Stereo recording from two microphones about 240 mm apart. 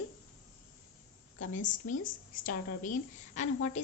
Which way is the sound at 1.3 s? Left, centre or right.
Left.